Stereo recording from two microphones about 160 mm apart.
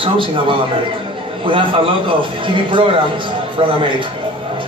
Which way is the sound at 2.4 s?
30° right (ahead or behind).